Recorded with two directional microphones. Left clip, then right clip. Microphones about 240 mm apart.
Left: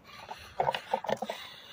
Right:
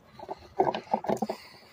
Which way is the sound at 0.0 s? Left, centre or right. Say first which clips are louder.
Right 3 dB; left.